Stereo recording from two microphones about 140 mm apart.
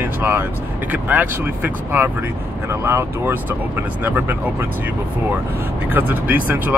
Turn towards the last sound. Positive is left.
turn(degrees=-10)  # may be behind; listen again after turning